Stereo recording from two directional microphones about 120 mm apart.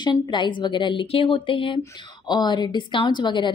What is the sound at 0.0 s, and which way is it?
A woman's voice, 40° left (ahead or behind).